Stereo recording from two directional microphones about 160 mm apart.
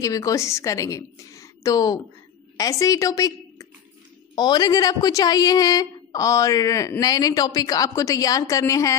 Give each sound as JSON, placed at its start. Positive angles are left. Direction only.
{"t": 0.0, "sound": "a woman's voice", "side_deg": 20}